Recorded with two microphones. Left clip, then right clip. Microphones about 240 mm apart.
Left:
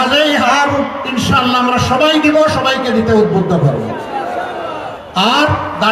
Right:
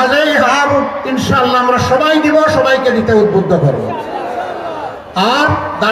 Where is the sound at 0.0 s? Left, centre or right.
Left.